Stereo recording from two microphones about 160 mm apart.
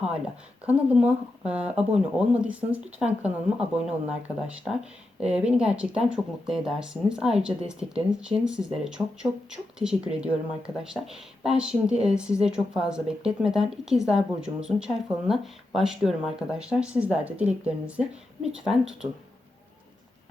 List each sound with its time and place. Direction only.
0.6 s speech: 10° right (ahead or behind)